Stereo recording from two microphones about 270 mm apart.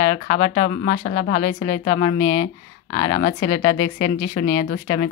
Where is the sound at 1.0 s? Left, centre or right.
Left.